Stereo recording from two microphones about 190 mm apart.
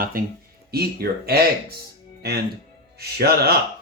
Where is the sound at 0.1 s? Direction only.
50° right (ahead or behind).